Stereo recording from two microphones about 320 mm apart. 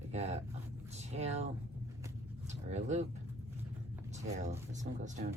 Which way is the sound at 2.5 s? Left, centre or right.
Right.